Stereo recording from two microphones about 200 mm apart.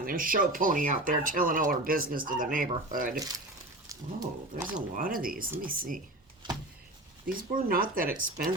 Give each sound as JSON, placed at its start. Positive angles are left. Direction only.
{"t": 0.0, "sound": "speech", "side_deg": -45}
{"t": 3.8, "sound": "speech", "side_deg": -15}
{"t": 4.9, "sound": "speech", "side_deg": -45}
{"t": 6.4, "sound": "a sound", "side_deg": -25}
{"t": 7.3, "sound": "speech", "side_deg": -45}